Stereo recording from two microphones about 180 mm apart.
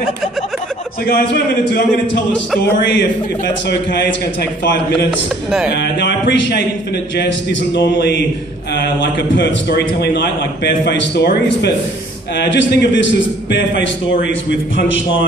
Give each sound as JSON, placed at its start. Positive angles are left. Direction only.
{"t": 1.0, "sound": "a man's voice", "side_deg": 55}
{"t": 2.8, "sound": "a man's voice", "side_deg": 80}
{"t": 3.9, "sound": "a man's voice", "side_deg": 65}
{"t": 5.7, "sound": "a man's voice", "side_deg": 70}
{"t": 7.7, "sound": "a man's voice", "side_deg": 70}
{"t": 9.4, "sound": "a man's voice", "side_deg": 65}
{"t": 12.4, "sound": "a man's voice", "side_deg": 80}